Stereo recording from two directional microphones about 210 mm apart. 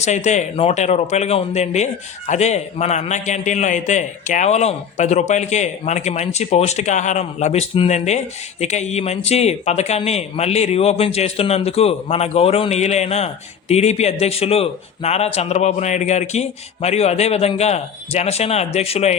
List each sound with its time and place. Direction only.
0.0 s speech: 35° left (ahead or behind)